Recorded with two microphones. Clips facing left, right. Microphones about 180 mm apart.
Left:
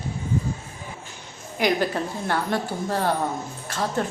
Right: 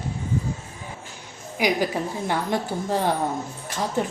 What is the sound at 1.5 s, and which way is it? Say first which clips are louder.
A woman's voice: even; 10° right (ahead or behind).